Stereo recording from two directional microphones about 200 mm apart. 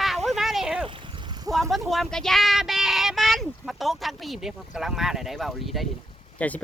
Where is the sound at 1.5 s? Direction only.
Centre (ahead or behind).